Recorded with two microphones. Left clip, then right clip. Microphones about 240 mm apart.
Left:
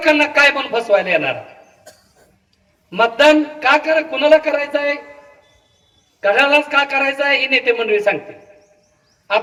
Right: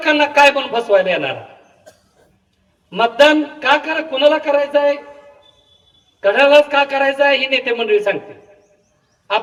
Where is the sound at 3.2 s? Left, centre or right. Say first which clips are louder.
Right 1 dB; right.